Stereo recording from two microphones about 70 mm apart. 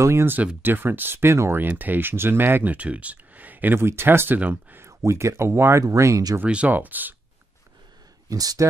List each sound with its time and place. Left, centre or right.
0.0 s speech: right
0.6 s speech: right
1.6 s speech: right
4.4 s speech: right
4.7 s speech: right
6.4 s speech: centre
8.3 s speech: right